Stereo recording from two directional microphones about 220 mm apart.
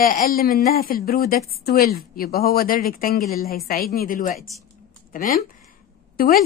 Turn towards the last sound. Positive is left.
turn(degrees=40)  # may be behind; listen again after turning